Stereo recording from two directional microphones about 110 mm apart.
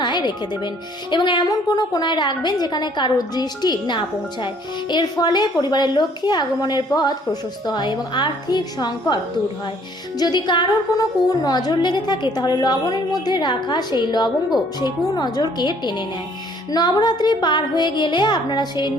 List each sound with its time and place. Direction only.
0.0 s music: 45° left (ahead or behind)
1.1 s a woman's voice: 45° left (ahead or behind)
10.2 s a woman's voice: 40° left (ahead or behind)